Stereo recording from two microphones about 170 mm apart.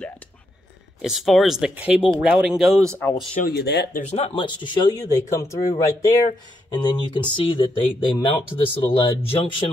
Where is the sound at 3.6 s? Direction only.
75° left (ahead or behind).